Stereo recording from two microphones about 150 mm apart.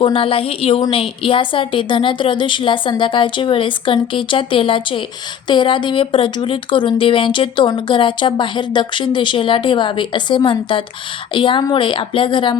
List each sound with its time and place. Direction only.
0.0 s speech: 35° left (ahead or behind)